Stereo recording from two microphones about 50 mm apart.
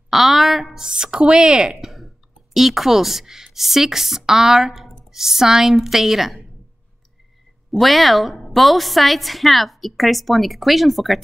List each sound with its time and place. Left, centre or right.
0.1 s a sound: centre
0.7 s a woman's voice: centre
1.7 s a woman's voice: centre
7.7 s a woman's voice: centre